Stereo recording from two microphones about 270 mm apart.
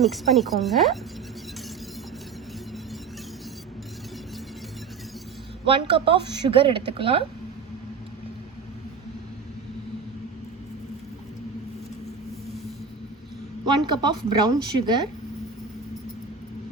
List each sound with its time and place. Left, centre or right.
0.0 s speech: centre
5.6 s a woman's voice: centre
13.8 s speech: centre